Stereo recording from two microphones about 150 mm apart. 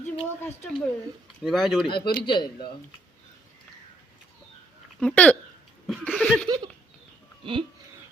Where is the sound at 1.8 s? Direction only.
30° left (ahead or behind).